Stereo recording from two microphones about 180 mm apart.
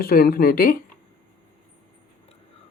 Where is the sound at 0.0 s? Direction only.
55° left (ahead or behind).